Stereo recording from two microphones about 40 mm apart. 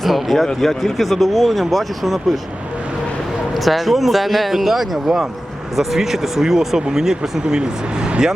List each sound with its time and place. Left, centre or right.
0.0 s a sound: centre
0.6 s speech: centre
3.5 s speech: centre